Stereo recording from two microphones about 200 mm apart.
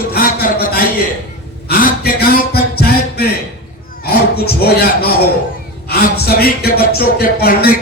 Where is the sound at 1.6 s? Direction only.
50° left (ahead or behind).